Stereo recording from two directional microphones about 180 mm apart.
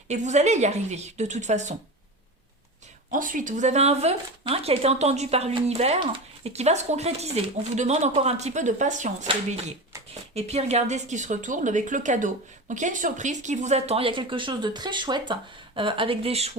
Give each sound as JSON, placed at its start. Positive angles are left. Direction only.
{"t": 0.1, "sound": "speech", "side_deg": -40}
{"t": 3.1, "sound": "speech", "side_deg": -50}
{"t": 10.3, "sound": "speech", "side_deg": -35}